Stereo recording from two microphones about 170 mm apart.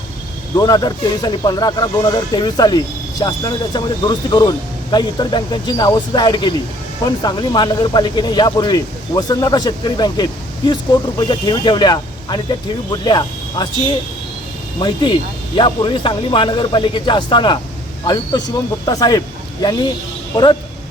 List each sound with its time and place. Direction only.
0.5 s speech: 25° left (ahead or behind)
14.8 s speech: 25° left (ahead or behind)
20.3 s speech: 25° left (ahead or behind)